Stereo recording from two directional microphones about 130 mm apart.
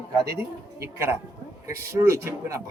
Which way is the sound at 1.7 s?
20° right (ahead or behind).